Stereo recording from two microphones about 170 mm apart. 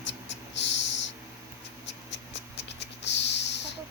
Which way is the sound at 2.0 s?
90° left.